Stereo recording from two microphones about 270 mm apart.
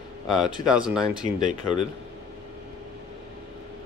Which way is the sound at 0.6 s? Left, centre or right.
Centre.